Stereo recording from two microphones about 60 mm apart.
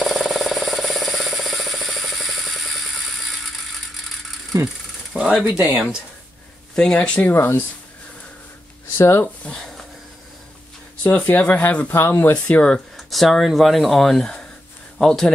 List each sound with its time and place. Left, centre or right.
0.0 s a sound: centre
4.5 s speech: right
5.1 s speech: centre
6.7 s speech: centre
7.3 s speech: left
8.9 s speech: left
9.4 s speech: left
11.0 s speech: left
11.9 s speech: left
12.4 s speech: left
12.9 s speech: centre